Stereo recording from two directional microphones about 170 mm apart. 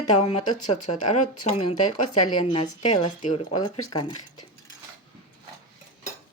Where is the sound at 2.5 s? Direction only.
30° left (ahead or behind).